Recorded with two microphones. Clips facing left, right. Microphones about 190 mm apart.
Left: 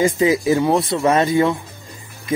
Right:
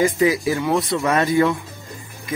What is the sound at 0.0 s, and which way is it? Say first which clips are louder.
Speech: left 1 dB; 25° left (ahead or behind).